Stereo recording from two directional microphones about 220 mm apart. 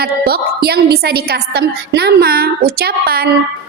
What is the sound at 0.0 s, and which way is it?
A woman's voice, 45° right (ahead or behind).